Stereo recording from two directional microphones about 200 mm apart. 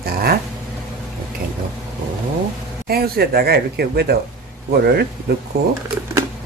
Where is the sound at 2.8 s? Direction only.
50° right (ahead or behind).